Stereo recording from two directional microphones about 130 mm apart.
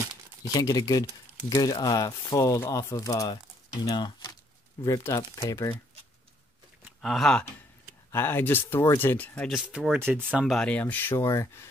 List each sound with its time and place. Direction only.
0.5 s speech: 30° left (ahead or behind)
7.0 s speech: centre (ahead or behind)
8.1 s speech: 20° left (ahead or behind)
9.5 s speech: 5° right (ahead or behind)
9.9 s speech: 15° right (ahead or behind)
10.4 s speech: 5° left (ahead or behind); by 11.7 s 25° left (ahead or behind)